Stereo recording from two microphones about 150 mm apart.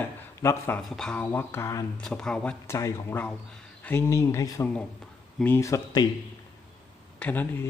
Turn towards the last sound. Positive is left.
turn(degrees=10)  # may be behind; listen again after turning